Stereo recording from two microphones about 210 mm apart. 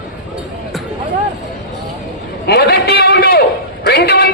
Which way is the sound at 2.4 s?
50° left (ahead or behind).